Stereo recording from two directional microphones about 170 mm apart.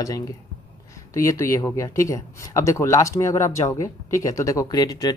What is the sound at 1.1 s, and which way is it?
Speech, 20° left (ahead or behind).